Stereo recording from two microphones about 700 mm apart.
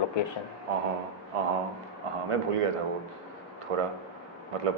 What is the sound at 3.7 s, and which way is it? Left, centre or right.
Speech, right.